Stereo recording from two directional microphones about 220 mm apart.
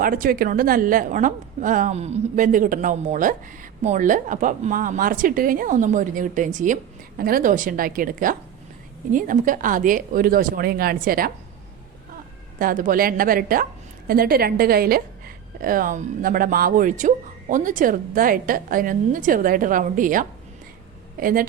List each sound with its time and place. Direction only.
0.0 s a woman's voice: 40° right (ahead or behind)
12.5 s a woman's voice: 40° right (ahead or behind)